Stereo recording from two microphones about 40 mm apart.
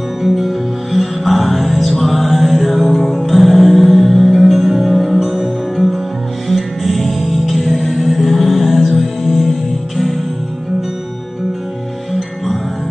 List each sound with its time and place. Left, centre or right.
0.2 s music: centre
7.8 s music: centre
8.4 s music: centre